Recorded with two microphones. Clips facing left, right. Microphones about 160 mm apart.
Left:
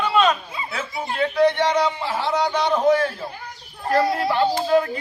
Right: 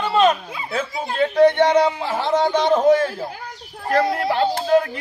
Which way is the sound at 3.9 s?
60° right (ahead or behind).